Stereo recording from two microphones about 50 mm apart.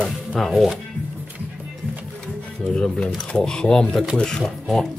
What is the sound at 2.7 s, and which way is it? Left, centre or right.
Speech, centre.